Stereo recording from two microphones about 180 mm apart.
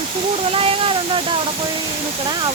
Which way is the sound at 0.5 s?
30° right (ahead or behind).